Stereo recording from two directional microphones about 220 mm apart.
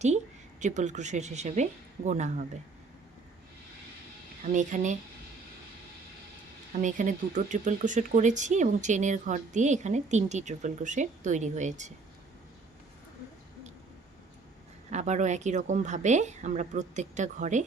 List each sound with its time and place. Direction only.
0.6 s speech: 35° right (ahead or behind)
4.5 s speech: 35° right (ahead or behind)
6.8 s speech: 35° right (ahead or behind)
14.8 s speech: 30° right (ahead or behind)